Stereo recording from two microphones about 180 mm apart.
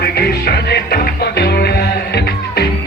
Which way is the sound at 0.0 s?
60° left (ahead or behind).